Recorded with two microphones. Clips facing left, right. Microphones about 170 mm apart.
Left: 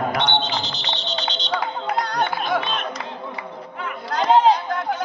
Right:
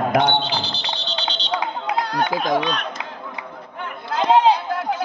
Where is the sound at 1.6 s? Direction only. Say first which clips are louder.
Even; 5° right (ahead or behind).